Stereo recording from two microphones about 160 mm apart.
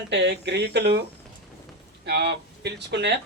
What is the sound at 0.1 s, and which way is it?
Speech, 90° right.